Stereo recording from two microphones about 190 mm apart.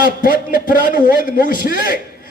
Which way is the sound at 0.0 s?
50° left (ahead or behind).